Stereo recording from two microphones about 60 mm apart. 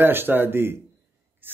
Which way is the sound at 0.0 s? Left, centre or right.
Right.